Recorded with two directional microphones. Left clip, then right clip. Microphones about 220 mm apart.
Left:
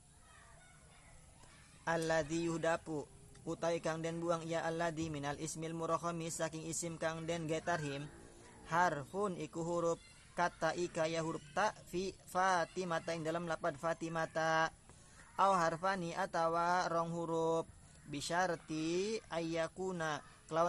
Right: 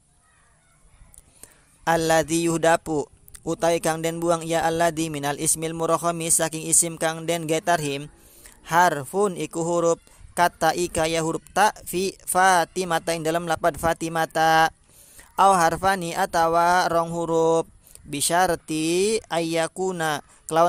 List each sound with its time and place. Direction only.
1.8 s a man's voice: 45° right (ahead or behind)